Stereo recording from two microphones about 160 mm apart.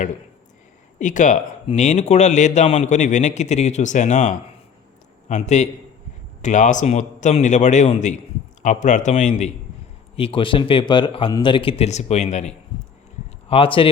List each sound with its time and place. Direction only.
0.9 s speech: 50° left (ahead or behind)
10.2 s a man's voice: 35° left (ahead or behind)
13.5 s a man's voice: 35° left (ahead or behind)